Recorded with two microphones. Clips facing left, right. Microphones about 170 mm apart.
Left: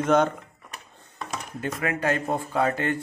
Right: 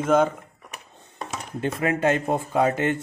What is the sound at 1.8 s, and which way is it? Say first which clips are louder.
Speech: right 4 dB; 25° right (ahead or behind).